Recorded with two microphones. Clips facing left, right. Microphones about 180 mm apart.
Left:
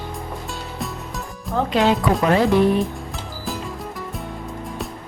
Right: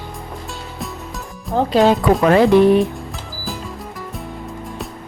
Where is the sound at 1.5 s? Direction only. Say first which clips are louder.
Right 4 dB; 35° right (ahead or behind).